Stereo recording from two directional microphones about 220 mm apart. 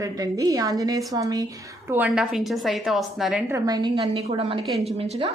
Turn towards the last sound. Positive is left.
turn(degrees=-25)  # may be behind; listen again after turning